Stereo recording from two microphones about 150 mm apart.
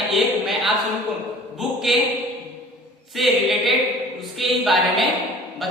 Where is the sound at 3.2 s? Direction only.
Centre (ahead or behind).